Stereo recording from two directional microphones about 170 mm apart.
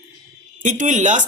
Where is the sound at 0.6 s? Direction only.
45° right (ahead or behind).